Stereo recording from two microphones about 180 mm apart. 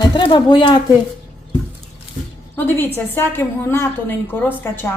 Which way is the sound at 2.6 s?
10° left (ahead or behind).